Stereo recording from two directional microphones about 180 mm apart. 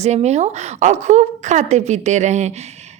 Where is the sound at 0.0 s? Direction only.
40° right (ahead or behind).